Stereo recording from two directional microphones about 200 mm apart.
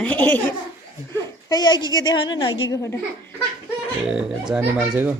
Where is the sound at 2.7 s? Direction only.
15° left (ahead or behind).